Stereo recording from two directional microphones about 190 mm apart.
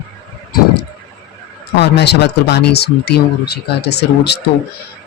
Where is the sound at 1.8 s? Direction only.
60° left (ahead or behind).